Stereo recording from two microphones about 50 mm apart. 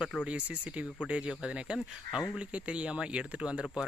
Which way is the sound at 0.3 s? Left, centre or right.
Right.